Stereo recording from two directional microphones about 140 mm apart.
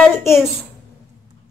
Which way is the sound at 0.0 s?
15° left (ahead or behind).